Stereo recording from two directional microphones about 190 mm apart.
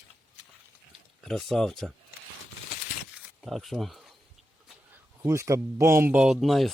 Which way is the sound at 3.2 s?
Centre (ahead or behind).